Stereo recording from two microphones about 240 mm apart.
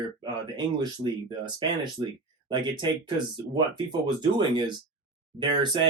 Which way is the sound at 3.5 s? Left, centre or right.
Centre.